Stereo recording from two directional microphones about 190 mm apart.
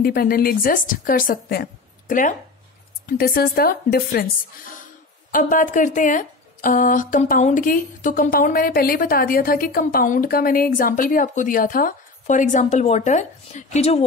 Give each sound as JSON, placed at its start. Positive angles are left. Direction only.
{"t": 0.0, "sound": "speech", "side_deg": 50}
{"t": 5.3, "sound": "speech", "side_deg": 45}